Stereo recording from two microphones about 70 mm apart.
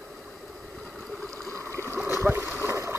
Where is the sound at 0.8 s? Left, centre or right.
Centre.